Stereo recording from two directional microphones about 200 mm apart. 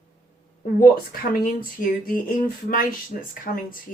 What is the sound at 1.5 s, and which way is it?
A woman's voice, 45° left (ahead or behind).